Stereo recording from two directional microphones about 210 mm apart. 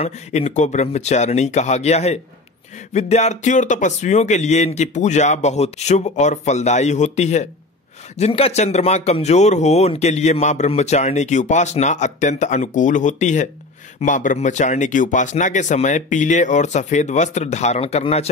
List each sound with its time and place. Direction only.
0.0 s a man's voice: 30° left (ahead or behind)